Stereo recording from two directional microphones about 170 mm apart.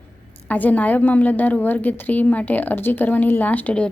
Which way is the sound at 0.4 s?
10° left (ahead or behind).